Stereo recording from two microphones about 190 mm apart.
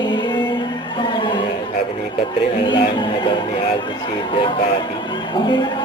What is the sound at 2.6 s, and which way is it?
Speech, 25° left (ahead or behind).